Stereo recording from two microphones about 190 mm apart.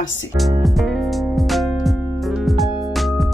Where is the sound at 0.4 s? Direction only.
Centre (ahead or behind).